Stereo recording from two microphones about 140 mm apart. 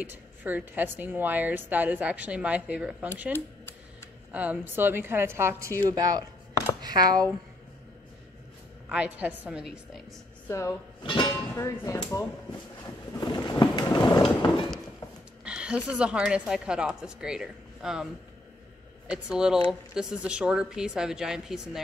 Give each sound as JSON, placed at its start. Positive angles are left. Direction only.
{"t": 0.0, "sound": "a woman's voice", "side_deg": -15}
{"t": 4.3, "sound": "a woman's voice", "side_deg": -10}
{"t": 8.8, "sound": "a woman's voice", "side_deg": -10}
{"t": 10.5, "sound": "speech", "side_deg": 20}
{"t": 11.0, "sound": "speech", "side_deg": 35}
{"t": 11.5, "sound": "speech", "side_deg": 20}
{"t": 13.1, "sound": "a sound", "side_deg": 30}
{"t": 15.4, "sound": "a woman's voice", "side_deg": -5}
{"t": 19.0, "sound": "a woman's voice", "side_deg": -5}